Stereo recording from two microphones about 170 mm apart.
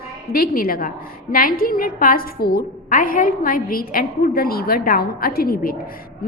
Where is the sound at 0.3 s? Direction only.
60° left (ahead or behind).